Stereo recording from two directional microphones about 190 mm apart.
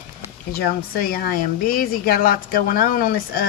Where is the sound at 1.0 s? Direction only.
50° left (ahead or behind).